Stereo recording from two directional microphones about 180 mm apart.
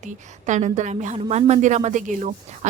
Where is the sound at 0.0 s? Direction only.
45° right (ahead or behind).